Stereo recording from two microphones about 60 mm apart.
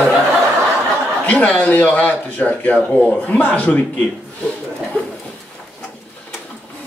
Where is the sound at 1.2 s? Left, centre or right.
Left.